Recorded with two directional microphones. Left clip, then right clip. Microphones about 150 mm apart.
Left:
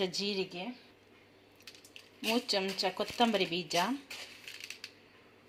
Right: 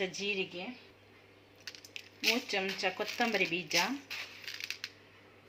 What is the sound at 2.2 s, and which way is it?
Speech, 60° left (ahead or behind).